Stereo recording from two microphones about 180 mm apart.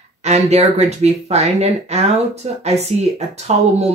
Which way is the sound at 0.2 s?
35° right (ahead or behind).